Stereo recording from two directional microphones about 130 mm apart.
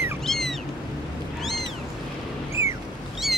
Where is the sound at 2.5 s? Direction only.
20° right (ahead or behind).